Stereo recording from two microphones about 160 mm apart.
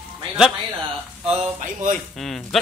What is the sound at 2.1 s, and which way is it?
Speech, centre (ahead or behind).